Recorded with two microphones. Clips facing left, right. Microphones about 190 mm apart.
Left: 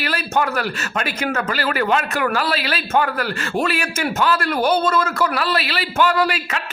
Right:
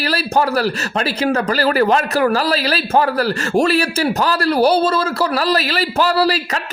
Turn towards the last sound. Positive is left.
turn(degrees=-35)  # may be behind; listen again after turning